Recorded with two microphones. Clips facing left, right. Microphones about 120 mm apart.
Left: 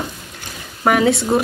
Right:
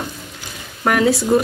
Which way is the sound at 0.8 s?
Centre (ahead or behind).